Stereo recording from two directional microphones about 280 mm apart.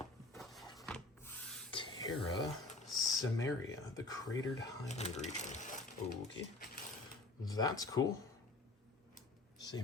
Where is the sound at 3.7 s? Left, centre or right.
Centre.